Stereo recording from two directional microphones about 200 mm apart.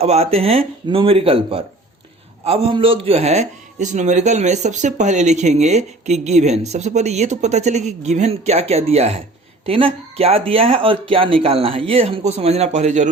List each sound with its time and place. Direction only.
0.0 s speech: 30° right (ahead or behind)